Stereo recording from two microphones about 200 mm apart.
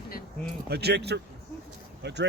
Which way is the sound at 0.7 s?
55° right (ahead or behind).